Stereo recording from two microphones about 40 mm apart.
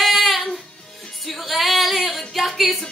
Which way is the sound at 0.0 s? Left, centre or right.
Centre.